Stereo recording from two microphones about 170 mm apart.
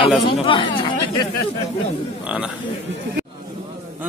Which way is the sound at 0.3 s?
30° left (ahead or behind).